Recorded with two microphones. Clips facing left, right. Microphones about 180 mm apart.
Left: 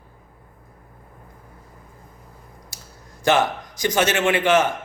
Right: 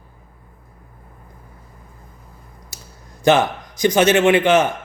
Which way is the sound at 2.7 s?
20° right (ahead or behind).